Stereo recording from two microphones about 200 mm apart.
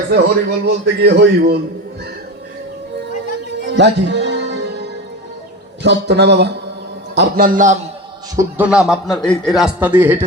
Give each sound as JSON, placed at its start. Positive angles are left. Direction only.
{"t": 0.1, "sound": "a man's voice", "side_deg": -55}
{"t": 3.6, "sound": "music", "side_deg": -60}
{"t": 5.8, "sound": "a man's voice", "side_deg": -60}
{"t": 7.2, "sound": "a man's voice", "side_deg": -45}
{"t": 8.4, "sound": "a man's voice", "side_deg": -10}